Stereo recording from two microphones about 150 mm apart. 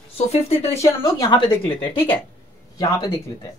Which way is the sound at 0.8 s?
25° left (ahead or behind).